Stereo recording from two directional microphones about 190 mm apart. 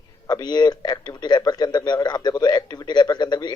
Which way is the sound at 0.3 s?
20° left (ahead or behind).